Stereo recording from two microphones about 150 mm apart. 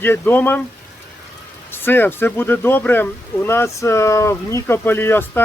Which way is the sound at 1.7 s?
15° left (ahead or behind).